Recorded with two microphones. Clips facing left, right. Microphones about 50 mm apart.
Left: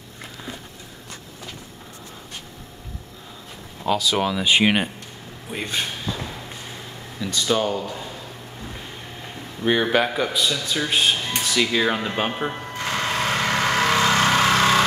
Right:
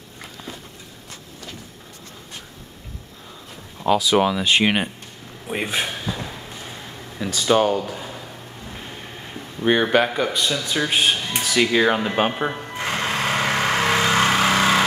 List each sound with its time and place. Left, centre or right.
3.8 s speech: centre
5.5 s speech: right
5.8 s a sound: centre
7.4 s speech: centre
9.6 s speech: centre
12.4 s vehicle: right
14.0 s a sound: centre